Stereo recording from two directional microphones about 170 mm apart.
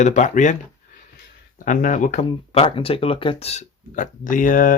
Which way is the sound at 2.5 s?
30° left (ahead or behind).